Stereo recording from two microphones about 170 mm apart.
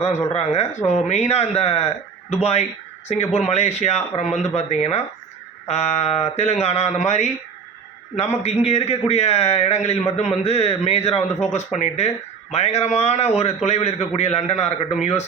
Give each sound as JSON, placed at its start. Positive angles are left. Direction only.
{"t": 0.3, "sound": "a man's voice", "side_deg": 40}